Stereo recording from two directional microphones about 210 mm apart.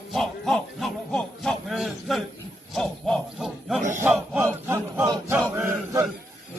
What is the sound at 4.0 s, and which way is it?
Battle cry, 10° right (ahead or behind).